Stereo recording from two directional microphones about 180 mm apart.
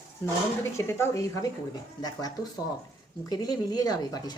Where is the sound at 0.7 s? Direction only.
15° left (ahead or behind).